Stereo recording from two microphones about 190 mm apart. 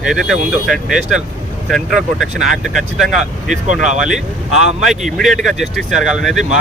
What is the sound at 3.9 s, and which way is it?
Speech, 5° right (ahead or behind).